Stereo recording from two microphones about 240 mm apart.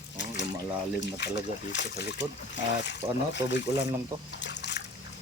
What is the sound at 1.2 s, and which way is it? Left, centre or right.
Speech, left.